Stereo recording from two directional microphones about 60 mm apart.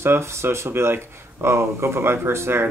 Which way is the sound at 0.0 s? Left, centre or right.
Right.